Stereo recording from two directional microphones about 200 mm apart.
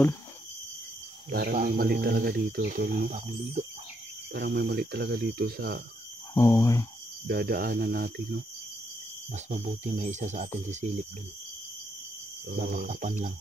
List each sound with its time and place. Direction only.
1.3 s speech: 45° right (ahead or behind)
4.3 s speech: 50° right (ahead or behind)
6.3 s speech: 15° left (ahead or behind)
7.2 s speech: 50° right (ahead or behind)
9.3 s speech: 35° right (ahead or behind)
12.5 s speech: 40° right (ahead or behind)